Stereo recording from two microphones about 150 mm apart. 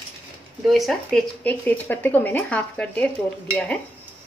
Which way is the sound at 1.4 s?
10° left (ahead or behind).